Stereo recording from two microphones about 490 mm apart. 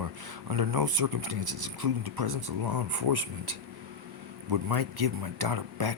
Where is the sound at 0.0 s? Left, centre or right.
Right.